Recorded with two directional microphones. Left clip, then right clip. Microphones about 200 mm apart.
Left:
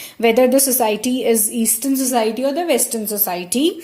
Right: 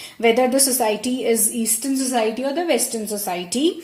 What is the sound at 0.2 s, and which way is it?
A woman's voice, 35° left (ahead or behind).